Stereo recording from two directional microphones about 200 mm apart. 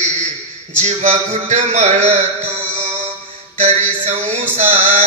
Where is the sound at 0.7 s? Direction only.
35° right (ahead or behind).